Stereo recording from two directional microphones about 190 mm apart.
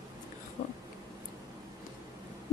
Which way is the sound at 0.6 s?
60° left (ahead or behind).